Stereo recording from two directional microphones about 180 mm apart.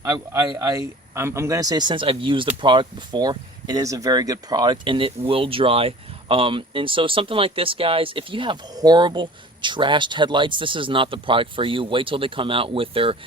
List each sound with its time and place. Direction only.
0.0 s speech: 15° right (ahead or behind)